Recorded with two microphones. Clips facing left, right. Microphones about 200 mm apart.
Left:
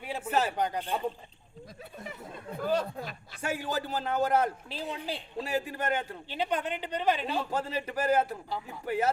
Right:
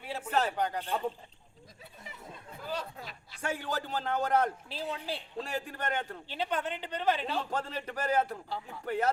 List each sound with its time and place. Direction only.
0.0 s a sound: 15° left (ahead or behind)
0.5 s a woman's voice: 15° left (ahead or behind)
2.6 s speech: 50° left (ahead or behind)
3.4 s a man's voice: 5° left (ahead or behind)
4.7 s a woman's voice: 15° left (ahead or behind)
5.4 s a man's voice: 5° left (ahead or behind)
6.2 s a woman's voice: 15° left (ahead or behind)